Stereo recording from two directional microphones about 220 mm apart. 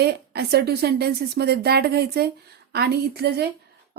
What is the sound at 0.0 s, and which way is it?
A woman's voice, 45° right (ahead or behind).